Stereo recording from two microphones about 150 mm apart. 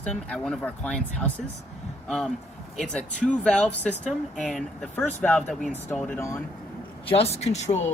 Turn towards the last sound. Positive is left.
turn(degrees=50)  # may be behind; listen again after turning